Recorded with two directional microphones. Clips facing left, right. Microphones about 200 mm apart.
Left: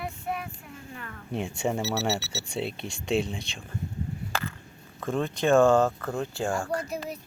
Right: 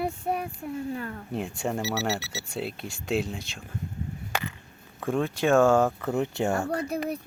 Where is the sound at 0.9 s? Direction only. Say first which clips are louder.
Right 8 dB; 35° right (ahead or behind).